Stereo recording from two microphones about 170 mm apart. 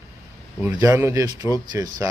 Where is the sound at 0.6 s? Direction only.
20° right (ahead or behind).